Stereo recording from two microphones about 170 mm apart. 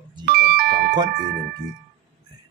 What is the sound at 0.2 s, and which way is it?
Doorbell, 60° right (ahead or behind).